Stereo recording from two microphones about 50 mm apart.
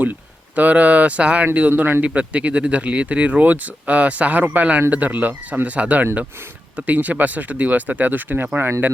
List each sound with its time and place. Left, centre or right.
0.0 s speech: right
1.5 s speech: right
2.0 s speech: right